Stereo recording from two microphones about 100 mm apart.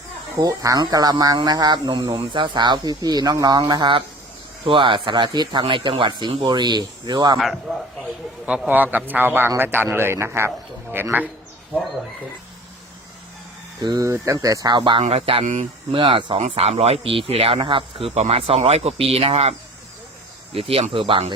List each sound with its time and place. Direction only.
0.3 s speech: 35° right (ahead or behind)
7.3 s a man's voice: centre (ahead or behind)
8.4 s a man's voice: 10° right (ahead or behind)
14.0 s speech: 30° right (ahead or behind)
14.8 s speech: 55° right (ahead or behind)
15.1 s speech: 70° right (ahead or behind); by 19.5 s 90° right
20.5 s speech: 75° right (ahead or behind); by 21.3 s 60° right (ahead or behind)